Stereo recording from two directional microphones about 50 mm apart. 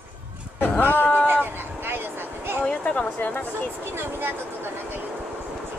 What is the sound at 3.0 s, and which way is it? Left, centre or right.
Speech, left.